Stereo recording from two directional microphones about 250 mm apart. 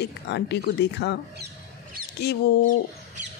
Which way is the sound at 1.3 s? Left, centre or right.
Right.